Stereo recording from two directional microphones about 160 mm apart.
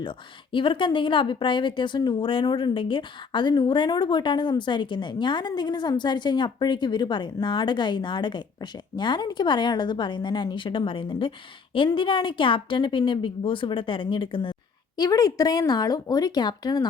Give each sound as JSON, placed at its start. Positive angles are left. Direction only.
{"t": 0.5, "sound": "a woman's voice", "side_deg": 30}